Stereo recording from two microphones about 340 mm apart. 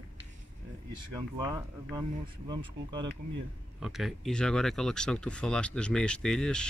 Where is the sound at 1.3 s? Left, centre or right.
Centre.